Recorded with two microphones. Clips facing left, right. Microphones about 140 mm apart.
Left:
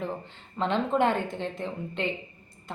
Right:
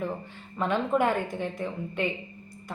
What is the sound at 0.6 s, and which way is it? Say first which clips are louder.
Speech: even; 20° left (ahead or behind).